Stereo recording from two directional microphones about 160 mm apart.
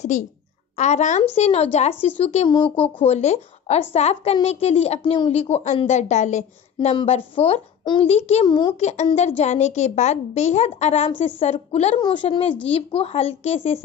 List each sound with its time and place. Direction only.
0.1 s a woman's voice: 50° left (ahead or behind)
8.5 s speech: 30° left (ahead or behind)
8.7 s a woman's voice: 45° left (ahead or behind)
12.0 s a woman's voice: 30° left (ahead or behind)